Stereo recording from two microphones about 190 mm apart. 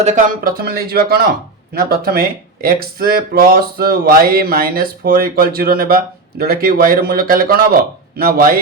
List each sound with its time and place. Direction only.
0.0 s speech: 40° right (ahead or behind)